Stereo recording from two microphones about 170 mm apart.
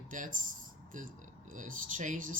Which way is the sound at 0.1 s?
50° right (ahead or behind).